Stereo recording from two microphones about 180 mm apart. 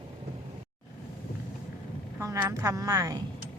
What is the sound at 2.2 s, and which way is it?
A woman's voice, 15° right (ahead or behind).